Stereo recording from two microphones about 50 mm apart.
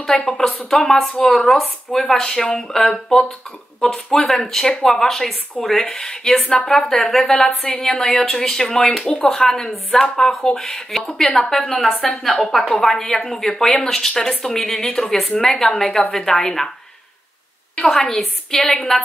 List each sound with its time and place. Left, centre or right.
0.1 s a woman's voice: centre
0.7 s a woman's voice: centre
6.8 s a woman's voice: centre
9.0 s speech: centre
9.3 s a woman's voice: centre
18.0 s a woman's voice: centre